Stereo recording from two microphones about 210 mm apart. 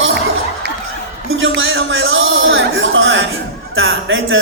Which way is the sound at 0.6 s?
50° right (ahead or behind).